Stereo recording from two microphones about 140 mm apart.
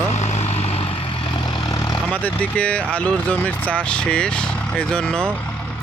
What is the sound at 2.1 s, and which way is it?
Speech, 10° left (ahead or behind).